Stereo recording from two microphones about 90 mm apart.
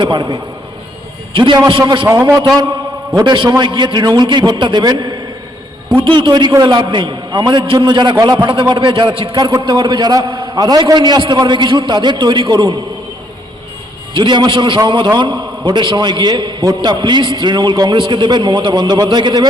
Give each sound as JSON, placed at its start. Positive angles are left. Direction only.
{"t": 0.0, "sound": "a man's voice", "side_deg": -60}
{"t": 2.0, "sound": "a man's voice", "side_deg": -30}
{"t": 3.2, "sound": "a man's voice", "side_deg": -65}
{"t": 9.4, "sound": "a man's voice", "side_deg": -45}
{"t": 14.2, "sound": "a man's voice", "side_deg": -60}